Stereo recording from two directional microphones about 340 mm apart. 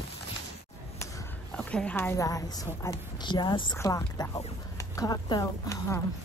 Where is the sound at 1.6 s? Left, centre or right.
Centre.